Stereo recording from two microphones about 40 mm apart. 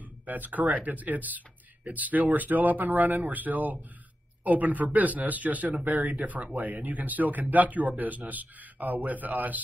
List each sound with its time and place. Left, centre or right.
0.3 s speech: right